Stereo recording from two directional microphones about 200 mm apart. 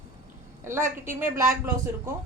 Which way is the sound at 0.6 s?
15° right (ahead or behind).